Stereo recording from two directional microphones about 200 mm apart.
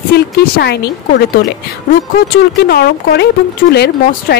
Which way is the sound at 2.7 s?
50° left (ahead or behind).